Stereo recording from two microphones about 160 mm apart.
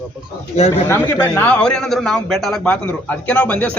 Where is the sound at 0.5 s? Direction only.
40° left (ahead or behind).